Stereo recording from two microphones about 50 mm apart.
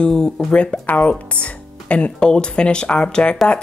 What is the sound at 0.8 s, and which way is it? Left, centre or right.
Speech, left.